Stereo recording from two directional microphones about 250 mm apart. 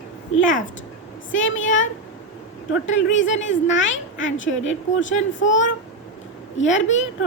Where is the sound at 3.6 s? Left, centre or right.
Left.